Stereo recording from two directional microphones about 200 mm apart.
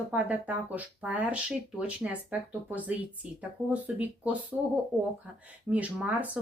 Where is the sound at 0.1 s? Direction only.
5° right (ahead or behind).